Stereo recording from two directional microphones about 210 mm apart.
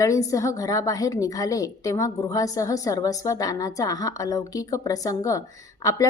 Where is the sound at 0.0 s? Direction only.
15° left (ahead or behind).